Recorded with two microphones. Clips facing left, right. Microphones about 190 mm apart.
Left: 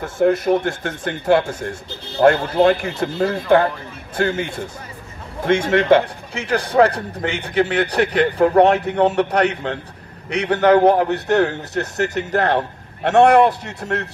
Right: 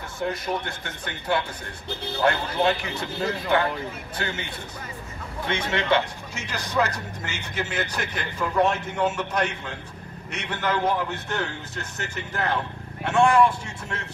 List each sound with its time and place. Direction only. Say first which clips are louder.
0.0 s a man's voice: left 12 dB; 50° left (ahead or behind); by 13.5 s 65° left (ahead or behind)